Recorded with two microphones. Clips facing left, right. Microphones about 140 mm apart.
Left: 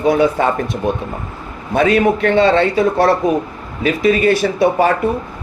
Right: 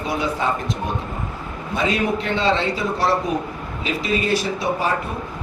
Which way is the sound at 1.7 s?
60° left (ahead or behind).